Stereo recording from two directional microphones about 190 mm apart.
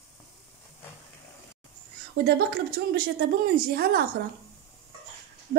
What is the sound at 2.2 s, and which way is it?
Speech, 55° right (ahead or behind).